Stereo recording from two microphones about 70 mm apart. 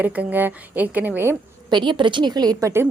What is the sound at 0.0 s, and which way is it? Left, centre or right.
A woman's voice, right.